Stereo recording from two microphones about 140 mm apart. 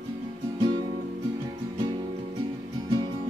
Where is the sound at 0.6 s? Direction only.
30° right (ahead or behind).